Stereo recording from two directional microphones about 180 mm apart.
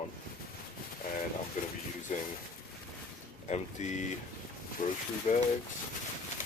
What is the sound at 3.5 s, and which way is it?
Speech, 40° left (ahead or behind).